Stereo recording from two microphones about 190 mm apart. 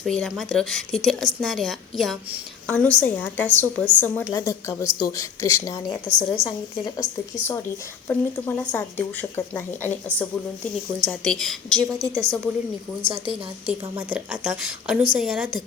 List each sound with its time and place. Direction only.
0.0 s a woman's voice: centre (ahead or behind)
6.1 s a woman's voice: 25° left (ahead or behind)
8.0 s a woman's voice: 10° left (ahead or behind)
11.9 s a woman's voice: 15° right (ahead or behind)
13.0 s a woman's voice: 30° right (ahead or behind)
14.1 s a woman's voice: 5° right (ahead or behind)